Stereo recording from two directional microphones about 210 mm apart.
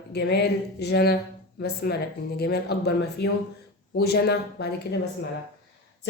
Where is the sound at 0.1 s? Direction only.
50° left (ahead or behind).